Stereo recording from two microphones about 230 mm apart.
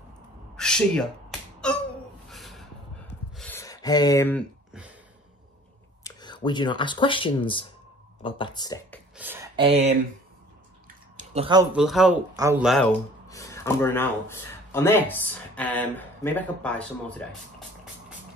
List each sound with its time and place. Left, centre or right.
0.6 s a sound: centre
6.0 s speech: centre
9.1 s a sound: centre
9.6 s speech: right
11.1 s a sound: right
11.7 s a man's voice: centre
12.4 s speech: centre
12.6 s a man's voice: centre
13.3 s speech: centre